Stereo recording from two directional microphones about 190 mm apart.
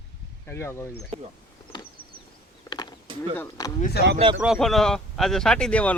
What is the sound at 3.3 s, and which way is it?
Speech, 15° left (ahead or behind).